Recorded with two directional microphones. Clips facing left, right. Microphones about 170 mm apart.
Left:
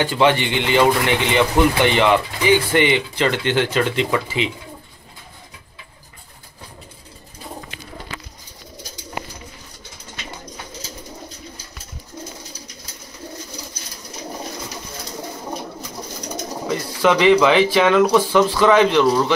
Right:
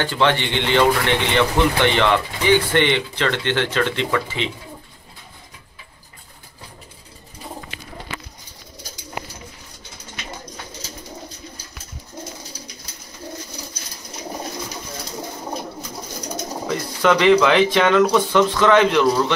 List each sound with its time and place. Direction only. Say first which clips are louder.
0.0 s speech: left 3 dB; 10° left (ahead or behind)
16.6 s speech: left 1 dB; 5° left (ahead or behind)